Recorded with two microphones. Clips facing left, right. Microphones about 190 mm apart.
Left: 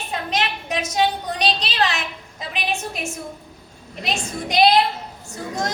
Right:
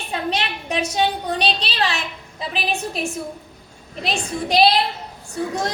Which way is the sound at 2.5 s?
35° right (ahead or behind).